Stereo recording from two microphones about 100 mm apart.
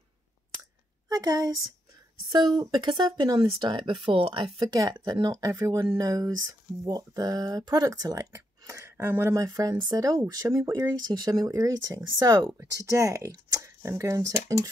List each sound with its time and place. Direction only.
1.0 s a woman's voice: 40° right (ahead or behind); by 9.3 s 25° right (ahead or behind)
9.3 s speech: 35° right (ahead or behind)